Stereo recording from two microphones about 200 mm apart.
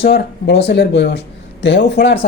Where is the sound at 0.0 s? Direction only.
55° left (ahead or behind).